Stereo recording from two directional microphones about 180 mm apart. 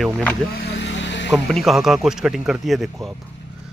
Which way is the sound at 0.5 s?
80° left.